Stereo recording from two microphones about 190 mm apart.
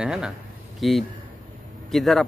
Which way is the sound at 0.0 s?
5° right (ahead or behind).